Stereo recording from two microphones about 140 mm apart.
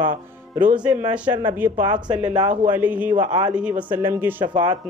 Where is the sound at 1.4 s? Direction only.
15° right (ahead or behind).